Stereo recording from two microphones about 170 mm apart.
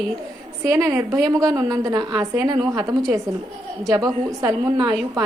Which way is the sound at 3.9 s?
20° right (ahead or behind).